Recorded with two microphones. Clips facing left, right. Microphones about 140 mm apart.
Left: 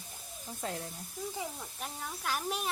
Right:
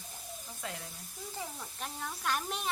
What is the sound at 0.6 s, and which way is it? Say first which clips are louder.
Speech: left 4 dB; 40° left (ahead or behind).